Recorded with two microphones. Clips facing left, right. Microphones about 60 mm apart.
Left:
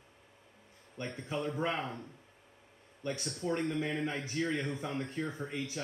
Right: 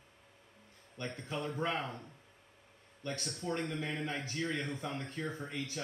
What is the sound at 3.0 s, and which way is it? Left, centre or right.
A man's voice, centre.